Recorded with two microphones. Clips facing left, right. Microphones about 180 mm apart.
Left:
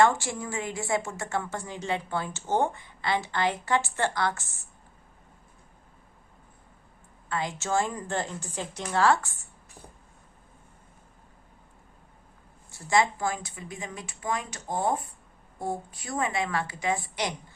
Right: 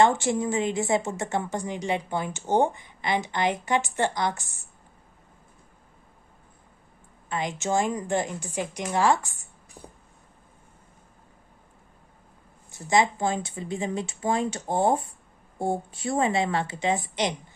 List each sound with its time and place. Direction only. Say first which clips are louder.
0.0 s a woman's voice: right 2 dB; 20° right (ahead or behind)
7.3 s a woman's voice: right 2 dB; 20° right (ahead or behind)
12.7 s a woman's voice: right 2 dB; 20° right (ahead or behind)